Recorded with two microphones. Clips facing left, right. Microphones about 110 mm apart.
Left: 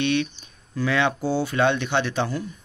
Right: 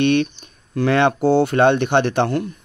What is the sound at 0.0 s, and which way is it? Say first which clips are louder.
Speech: right 6 dB; 50° right (ahead or behind).